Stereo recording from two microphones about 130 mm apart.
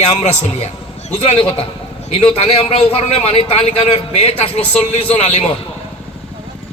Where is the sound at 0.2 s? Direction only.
55° left (ahead or behind).